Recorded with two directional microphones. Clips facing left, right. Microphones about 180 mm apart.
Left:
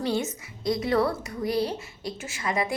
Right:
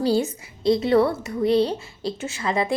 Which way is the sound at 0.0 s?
30° right (ahead or behind).